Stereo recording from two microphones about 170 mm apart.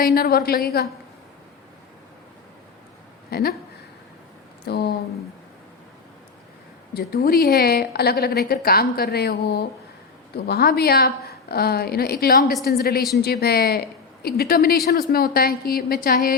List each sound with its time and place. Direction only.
0.0 s a woman's voice: 60° left (ahead or behind)
3.2 s a woman's voice: 65° left (ahead or behind)
4.6 s speech: 75° left (ahead or behind)
6.9 s a woman's voice: 65° left (ahead or behind)